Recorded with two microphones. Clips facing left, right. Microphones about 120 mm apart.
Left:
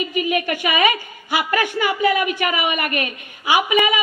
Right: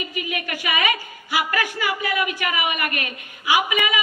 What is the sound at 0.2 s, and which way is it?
A woman's voice, 30° left (ahead or behind).